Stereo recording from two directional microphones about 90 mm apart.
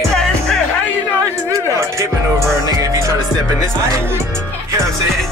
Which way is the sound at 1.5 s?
35° right (ahead or behind).